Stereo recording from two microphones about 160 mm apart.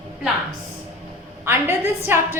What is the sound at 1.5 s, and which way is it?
Speech, 15° right (ahead or behind).